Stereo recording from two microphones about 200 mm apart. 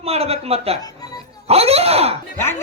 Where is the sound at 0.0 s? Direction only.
30° right (ahead or behind).